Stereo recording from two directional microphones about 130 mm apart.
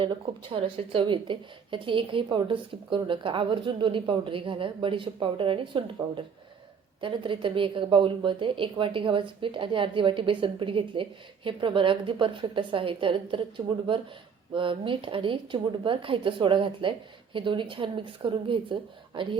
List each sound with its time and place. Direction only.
0.0 s a woman's voice: 40° right (ahead or behind)